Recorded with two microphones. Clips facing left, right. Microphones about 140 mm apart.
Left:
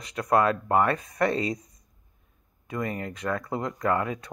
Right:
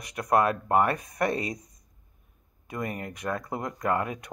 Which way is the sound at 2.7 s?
15° right (ahead or behind).